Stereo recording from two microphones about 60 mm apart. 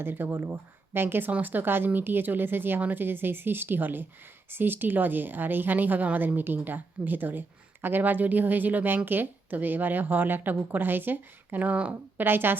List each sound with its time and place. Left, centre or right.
0.0 s a woman's voice: right
12.2 s a woman's voice: right